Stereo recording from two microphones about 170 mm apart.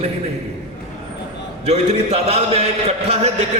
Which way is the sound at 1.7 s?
40° right (ahead or behind).